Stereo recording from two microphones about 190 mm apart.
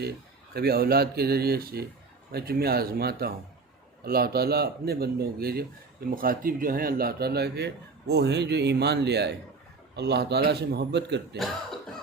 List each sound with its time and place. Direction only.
0.5 s speech: 55° right (ahead or behind)